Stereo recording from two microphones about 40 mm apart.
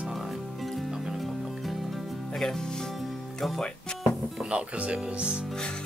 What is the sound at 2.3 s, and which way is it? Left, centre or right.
Music, centre.